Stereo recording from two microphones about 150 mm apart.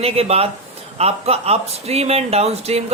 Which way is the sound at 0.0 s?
40° right (ahead or behind).